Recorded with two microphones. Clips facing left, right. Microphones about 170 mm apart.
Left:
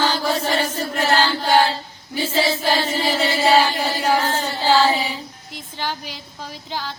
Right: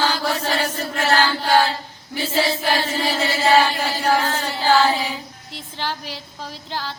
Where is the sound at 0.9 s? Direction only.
10° left (ahead or behind).